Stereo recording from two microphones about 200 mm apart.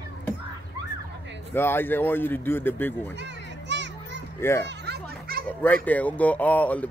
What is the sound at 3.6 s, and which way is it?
Children playing, 60° right (ahead or behind).